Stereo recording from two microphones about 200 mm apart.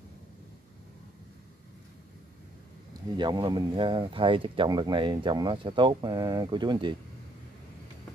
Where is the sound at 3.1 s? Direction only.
20° right (ahead or behind).